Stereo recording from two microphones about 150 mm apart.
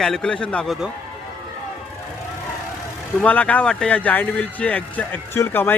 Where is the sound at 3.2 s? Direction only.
10° left (ahead or behind).